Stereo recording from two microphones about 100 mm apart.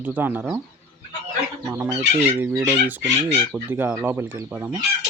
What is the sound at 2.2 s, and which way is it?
Speech, 30° right (ahead or behind).